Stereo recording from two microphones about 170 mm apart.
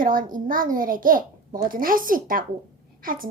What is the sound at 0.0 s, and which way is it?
A child's voice, 55° right (ahead or behind).